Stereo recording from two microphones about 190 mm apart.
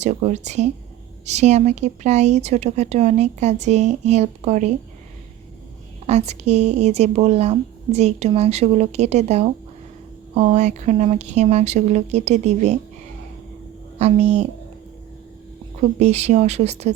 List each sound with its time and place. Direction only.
0.0 s speech: 35° right (ahead or behind)
6.1 s speech: 35° right (ahead or behind)
14.0 s speech: 35° right (ahead or behind)
16.0 s speech: 35° right (ahead or behind)